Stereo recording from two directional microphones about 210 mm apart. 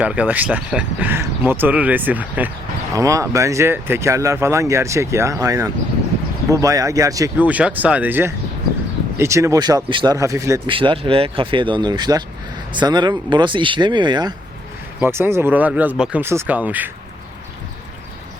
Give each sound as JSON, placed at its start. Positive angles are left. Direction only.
{"t": 0.0, "sound": "speech", "side_deg": -5}